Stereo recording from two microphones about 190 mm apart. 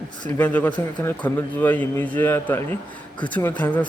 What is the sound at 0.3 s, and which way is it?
A man's voice, 10° left (ahead or behind).